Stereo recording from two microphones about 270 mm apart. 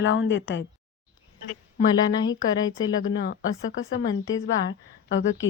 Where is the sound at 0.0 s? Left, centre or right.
Left.